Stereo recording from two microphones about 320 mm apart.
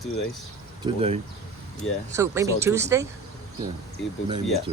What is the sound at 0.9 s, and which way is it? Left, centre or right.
Speech, centre.